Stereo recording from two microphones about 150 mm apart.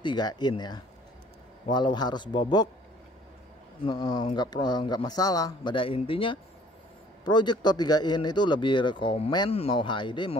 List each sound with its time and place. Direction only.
0.0 s speech: 30° left (ahead or behind)
3.8 s speech: 30° left (ahead or behind)